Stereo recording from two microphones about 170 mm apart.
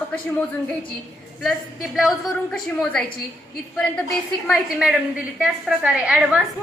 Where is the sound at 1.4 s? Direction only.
Centre (ahead or behind).